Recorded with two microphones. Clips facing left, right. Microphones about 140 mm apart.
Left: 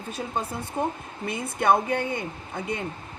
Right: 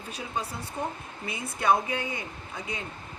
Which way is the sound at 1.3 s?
55° left (ahead or behind).